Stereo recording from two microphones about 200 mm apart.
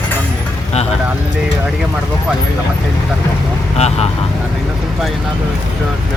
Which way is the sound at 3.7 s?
30° left (ahead or behind).